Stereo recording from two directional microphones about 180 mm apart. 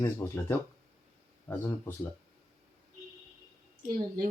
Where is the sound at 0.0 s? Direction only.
10° left (ahead or behind).